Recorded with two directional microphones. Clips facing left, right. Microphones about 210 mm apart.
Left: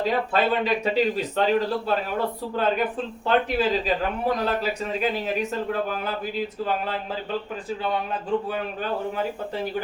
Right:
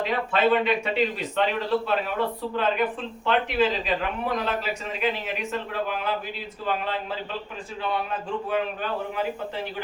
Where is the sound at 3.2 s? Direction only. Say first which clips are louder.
Left 1 dB; 40° left (ahead or behind).